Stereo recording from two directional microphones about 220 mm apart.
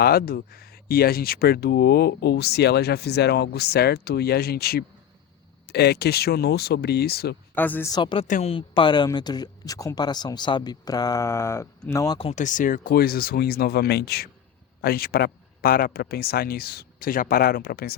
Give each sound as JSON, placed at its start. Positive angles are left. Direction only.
{"t": 0.0, "sound": "speech", "side_deg": 45}
{"t": 7.5, "sound": "speech", "side_deg": 10}
{"t": 7.9, "sound": "speech", "side_deg": 20}
{"t": 12.3, "sound": "speech", "side_deg": 35}